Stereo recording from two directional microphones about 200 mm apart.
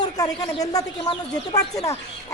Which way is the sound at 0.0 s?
20° left (ahead or behind).